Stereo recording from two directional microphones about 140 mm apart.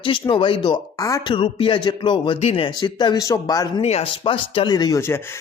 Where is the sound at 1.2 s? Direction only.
40° left (ahead or behind).